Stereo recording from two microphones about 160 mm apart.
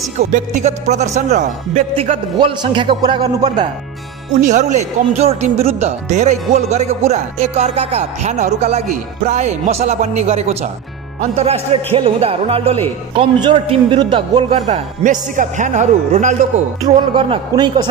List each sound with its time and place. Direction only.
0.3 s speech: 50° right (ahead or behind)
2.3 s speech: 30° right (ahead or behind)
4.4 s a man's voice: 50° right (ahead or behind)
17.1 s a man's voice: 30° right (ahead or behind)